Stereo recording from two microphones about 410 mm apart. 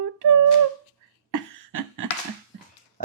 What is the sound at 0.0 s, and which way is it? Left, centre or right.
Humming, right.